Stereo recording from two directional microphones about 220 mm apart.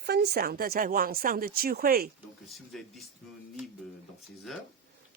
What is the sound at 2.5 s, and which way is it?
Speech, centre (ahead or behind).